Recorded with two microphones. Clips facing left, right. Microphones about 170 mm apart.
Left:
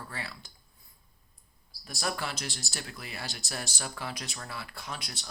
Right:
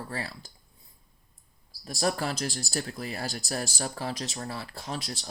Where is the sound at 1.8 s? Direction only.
35° right (ahead or behind).